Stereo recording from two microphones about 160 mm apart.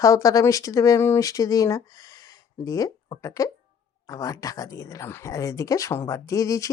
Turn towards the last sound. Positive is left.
turn(degrees=20)  # may be behind; listen again after turning